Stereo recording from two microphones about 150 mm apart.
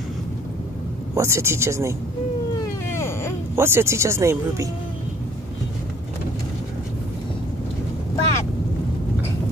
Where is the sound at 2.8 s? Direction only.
15° left (ahead or behind).